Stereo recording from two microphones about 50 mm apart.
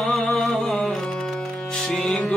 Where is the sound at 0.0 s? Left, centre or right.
Centre.